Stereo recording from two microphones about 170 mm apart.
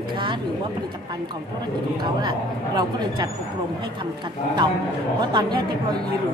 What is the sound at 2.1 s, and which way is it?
A woman's voice, 25° right (ahead or behind).